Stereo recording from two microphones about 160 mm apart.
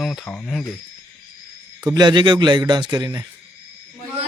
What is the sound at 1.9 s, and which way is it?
A man's voice, 30° right (ahead or behind).